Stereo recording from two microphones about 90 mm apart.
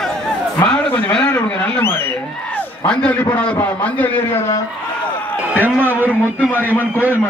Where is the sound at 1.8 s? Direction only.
25° left (ahead or behind).